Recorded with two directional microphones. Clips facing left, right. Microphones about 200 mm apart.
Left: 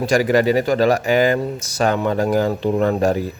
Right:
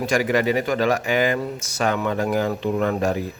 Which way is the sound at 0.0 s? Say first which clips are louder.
Left 4 dB; 35° left (ahead or behind).